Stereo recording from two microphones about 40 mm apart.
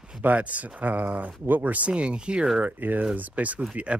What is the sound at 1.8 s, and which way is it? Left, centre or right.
Speech, right.